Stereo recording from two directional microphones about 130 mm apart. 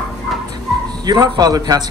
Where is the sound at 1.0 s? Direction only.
30° right (ahead or behind).